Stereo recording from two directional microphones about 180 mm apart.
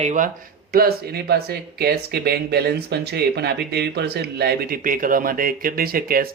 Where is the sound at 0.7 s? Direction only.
60° right (ahead or behind).